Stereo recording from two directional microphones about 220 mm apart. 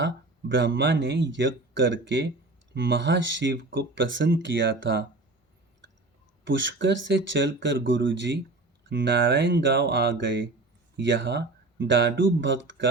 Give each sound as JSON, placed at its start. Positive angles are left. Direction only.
{"t": 0.0, "sound": "speech", "side_deg": -55}
{"t": 6.4, "sound": "speech", "side_deg": -55}